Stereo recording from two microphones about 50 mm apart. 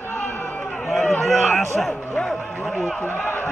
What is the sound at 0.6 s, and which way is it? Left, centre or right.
Chatter, left.